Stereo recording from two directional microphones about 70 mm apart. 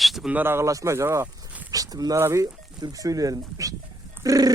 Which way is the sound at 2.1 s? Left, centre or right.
Right.